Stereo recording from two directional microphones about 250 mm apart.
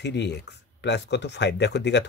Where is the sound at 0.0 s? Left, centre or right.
Left.